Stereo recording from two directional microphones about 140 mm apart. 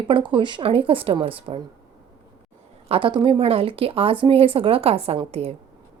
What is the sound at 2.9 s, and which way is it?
A woman's voice, 35° right (ahead or behind).